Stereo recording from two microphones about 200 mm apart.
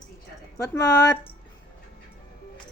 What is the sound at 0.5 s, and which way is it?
Speech, 15° left (ahead or behind).